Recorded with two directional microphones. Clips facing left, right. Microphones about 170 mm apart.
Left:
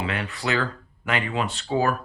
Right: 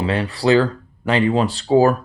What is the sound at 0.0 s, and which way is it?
Speech, 35° right (ahead or behind).